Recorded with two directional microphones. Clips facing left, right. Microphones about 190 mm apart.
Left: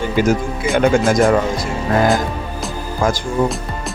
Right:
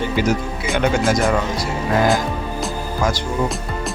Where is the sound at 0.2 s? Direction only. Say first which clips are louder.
Left 6 dB; 50° left (ahead or behind).